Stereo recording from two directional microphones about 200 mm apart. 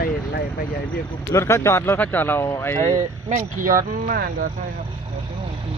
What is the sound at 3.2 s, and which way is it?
Speech, 40° right (ahead or behind).